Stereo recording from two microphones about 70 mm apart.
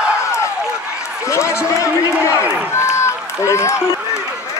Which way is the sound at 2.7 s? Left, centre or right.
Left.